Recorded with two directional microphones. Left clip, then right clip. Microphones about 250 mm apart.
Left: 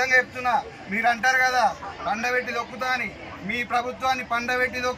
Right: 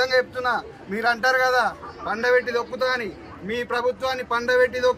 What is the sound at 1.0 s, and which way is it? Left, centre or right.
Speech, right.